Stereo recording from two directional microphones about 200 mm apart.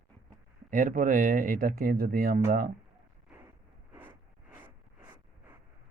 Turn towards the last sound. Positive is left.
turn(degrees=-10)  # may be behind; listen again after turning